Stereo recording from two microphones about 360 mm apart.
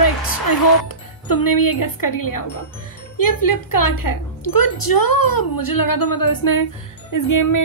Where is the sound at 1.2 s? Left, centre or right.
Left.